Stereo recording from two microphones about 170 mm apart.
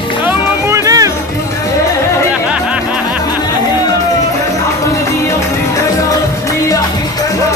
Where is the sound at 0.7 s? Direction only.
20° right (ahead or behind).